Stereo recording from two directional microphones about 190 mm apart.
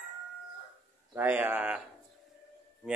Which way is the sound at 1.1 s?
10° right (ahead or behind).